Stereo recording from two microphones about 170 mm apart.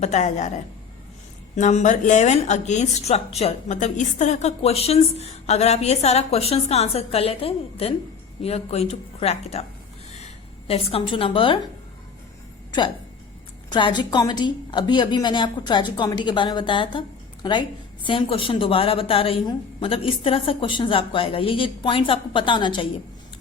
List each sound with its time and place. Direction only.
0.0 s a woman's voice: 45° left (ahead or behind)
10.7 s a woman's voice: 35° left (ahead or behind)
13.7 s a woman's voice: 25° left (ahead or behind)